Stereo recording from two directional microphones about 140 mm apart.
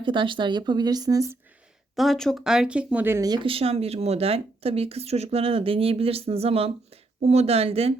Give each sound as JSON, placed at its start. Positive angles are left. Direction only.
{"t": 0.0, "sound": "speech", "side_deg": -35}
{"t": 2.0, "sound": "speech", "side_deg": 0}
{"t": 3.2, "sound": "speech", "side_deg": -35}